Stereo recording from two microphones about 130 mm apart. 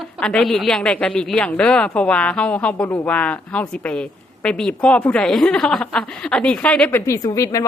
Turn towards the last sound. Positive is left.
turn(degrees=25)  # may be behind; listen again after turning